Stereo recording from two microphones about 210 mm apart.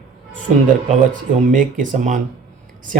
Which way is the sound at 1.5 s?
40° right (ahead or behind).